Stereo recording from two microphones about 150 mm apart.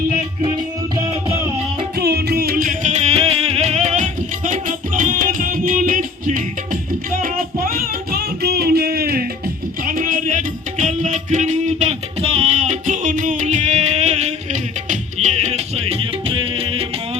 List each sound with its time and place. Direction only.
2.0 s music: 90° right
9.8 s music: 65° right (ahead or behind); by 16.8 s 40° right (ahead or behind)